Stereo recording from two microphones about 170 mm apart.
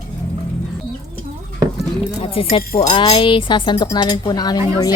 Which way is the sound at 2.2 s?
35° left (ahead or behind).